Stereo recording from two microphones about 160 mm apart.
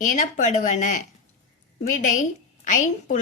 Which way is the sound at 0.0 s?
50° left (ahead or behind).